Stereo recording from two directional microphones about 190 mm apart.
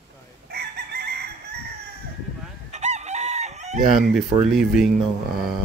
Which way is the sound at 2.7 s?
35° right (ahead or behind).